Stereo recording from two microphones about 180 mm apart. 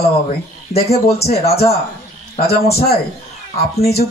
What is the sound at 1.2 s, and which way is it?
Speech, 35° left (ahead or behind).